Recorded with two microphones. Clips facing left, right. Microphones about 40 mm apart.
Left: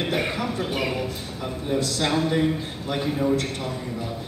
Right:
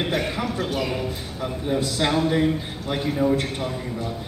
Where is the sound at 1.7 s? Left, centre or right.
Centre.